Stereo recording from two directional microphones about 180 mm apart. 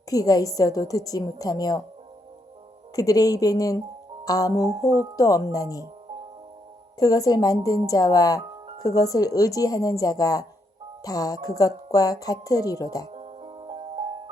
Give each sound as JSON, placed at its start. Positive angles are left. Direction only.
{"t": 0.1, "sound": "speech", "side_deg": 20}
{"t": 2.9, "sound": "speech", "side_deg": 20}
{"t": 7.0, "sound": "speech", "side_deg": 20}
{"t": 13.1, "sound": "music", "side_deg": -35}